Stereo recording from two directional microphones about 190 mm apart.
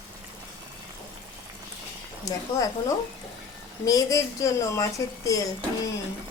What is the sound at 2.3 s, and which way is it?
Speech, 20° left (ahead or behind).